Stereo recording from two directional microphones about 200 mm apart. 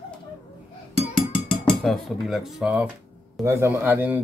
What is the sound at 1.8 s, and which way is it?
Speech, centre (ahead or behind).